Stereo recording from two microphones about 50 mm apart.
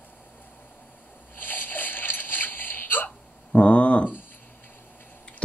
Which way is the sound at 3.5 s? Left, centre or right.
Left.